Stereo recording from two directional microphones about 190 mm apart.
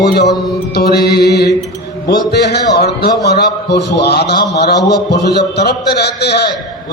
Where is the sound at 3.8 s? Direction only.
60° left (ahead or behind).